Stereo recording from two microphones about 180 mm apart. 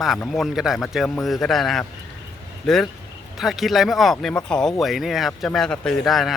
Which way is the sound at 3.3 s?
Centre (ahead or behind).